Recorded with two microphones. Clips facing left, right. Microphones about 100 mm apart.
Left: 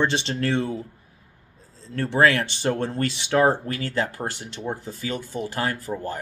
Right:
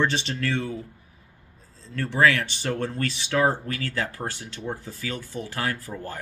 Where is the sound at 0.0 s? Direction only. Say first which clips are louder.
Left 2 dB; 25° left (ahead or behind).